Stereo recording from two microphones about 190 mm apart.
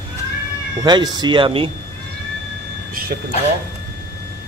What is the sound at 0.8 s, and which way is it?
Speech, 20° right (ahead or behind).